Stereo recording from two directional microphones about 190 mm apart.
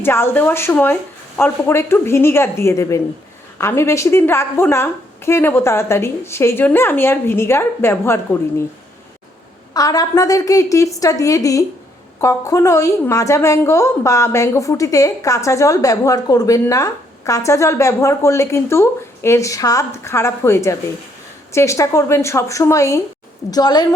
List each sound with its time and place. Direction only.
0.0 s a woman's voice: 10° left (ahead or behind)
9.7 s a woman's voice: 20° left (ahead or behind)